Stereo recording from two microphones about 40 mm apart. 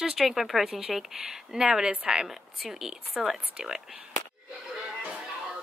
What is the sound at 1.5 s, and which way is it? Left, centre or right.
Speech, right.